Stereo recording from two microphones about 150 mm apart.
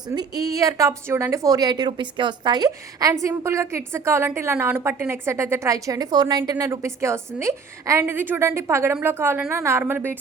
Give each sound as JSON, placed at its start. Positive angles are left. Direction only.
{"t": 0.1, "sound": "speech", "side_deg": -25}